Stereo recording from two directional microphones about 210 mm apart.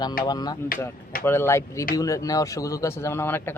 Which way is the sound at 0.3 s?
20° left (ahead or behind).